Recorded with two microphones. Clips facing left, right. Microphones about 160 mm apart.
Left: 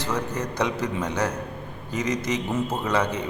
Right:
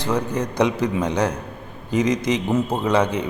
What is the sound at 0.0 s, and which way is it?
A man's voice, 15° right (ahead or behind).